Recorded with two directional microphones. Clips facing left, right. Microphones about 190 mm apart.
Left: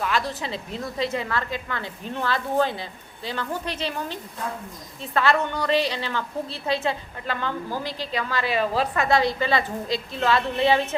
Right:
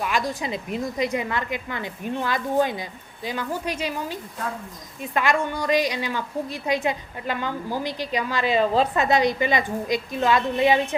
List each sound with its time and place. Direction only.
0.0 s a woman's voice: 15° right (ahead or behind)